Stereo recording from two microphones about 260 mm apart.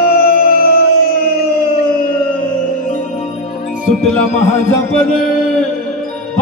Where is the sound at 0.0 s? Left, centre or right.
Left.